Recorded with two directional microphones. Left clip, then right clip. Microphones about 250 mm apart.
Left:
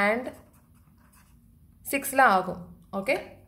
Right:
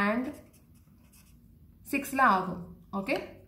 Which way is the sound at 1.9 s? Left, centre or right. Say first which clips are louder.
Left 4 dB; left.